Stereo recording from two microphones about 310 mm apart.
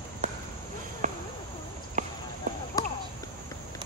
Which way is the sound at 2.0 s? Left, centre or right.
Right.